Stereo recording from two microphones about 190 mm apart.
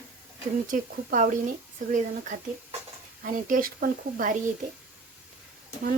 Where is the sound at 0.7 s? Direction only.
45° right (ahead or behind).